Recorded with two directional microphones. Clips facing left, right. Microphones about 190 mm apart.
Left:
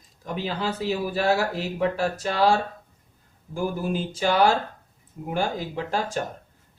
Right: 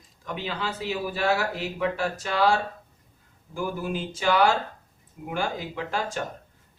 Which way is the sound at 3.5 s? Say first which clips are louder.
Left 3 dB; 35° left (ahead or behind).